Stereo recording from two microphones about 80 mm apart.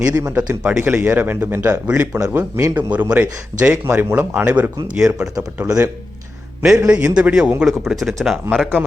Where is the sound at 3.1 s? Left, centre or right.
Centre.